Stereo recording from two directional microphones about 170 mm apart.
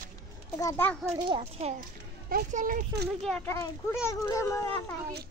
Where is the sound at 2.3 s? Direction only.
50° right (ahead or behind).